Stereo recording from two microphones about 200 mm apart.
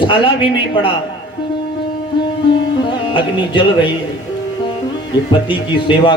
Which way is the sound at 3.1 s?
25° left (ahead or behind).